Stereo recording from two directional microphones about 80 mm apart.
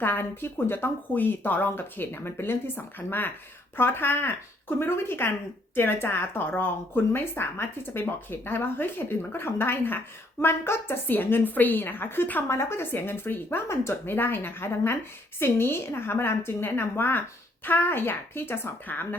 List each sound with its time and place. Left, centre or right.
0.0 s a woman's voice: left